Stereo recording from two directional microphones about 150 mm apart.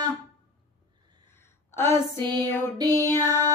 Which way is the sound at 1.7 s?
15° left (ahead or behind).